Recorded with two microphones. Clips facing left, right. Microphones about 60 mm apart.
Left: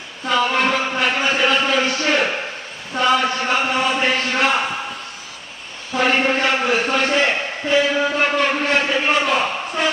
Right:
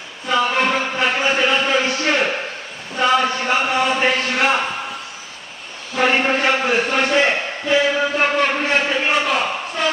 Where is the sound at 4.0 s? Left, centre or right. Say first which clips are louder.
Right 1 dB; centre.